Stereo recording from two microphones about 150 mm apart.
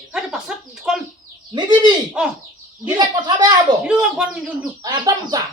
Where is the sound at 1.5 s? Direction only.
30° right (ahead or behind).